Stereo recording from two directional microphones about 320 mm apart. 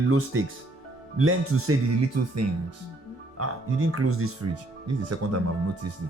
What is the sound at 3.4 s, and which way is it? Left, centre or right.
Speech, right.